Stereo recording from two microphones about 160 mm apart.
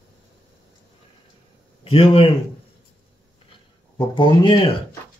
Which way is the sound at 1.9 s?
35° left (ahead or behind).